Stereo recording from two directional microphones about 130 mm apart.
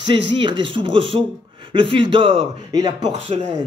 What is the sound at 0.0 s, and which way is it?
Speech, 40° right (ahead or behind).